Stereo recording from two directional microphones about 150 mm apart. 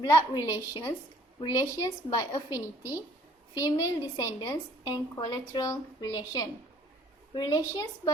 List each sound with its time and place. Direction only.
0.0 s a woman's voice: 25° left (ahead or behind)
3.5 s a woman's voice: 20° left (ahead or behind)